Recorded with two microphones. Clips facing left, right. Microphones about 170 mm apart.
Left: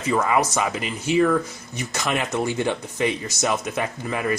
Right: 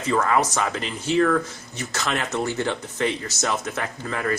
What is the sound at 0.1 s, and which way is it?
Speech, 10° left (ahead or behind).